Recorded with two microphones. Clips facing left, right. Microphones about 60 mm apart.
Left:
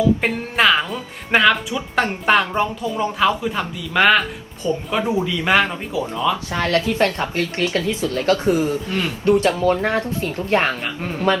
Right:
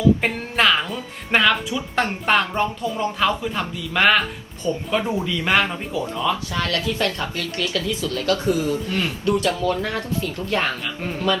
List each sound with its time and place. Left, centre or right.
0.2 s speech: centre
6.5 s speech: left